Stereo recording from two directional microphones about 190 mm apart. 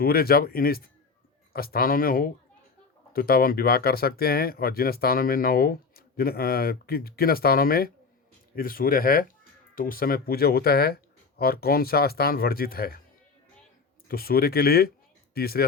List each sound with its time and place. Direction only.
0.0 s speech: 55° left (ahead or behind)
14.1 s speech: 55° left (ahead or behind)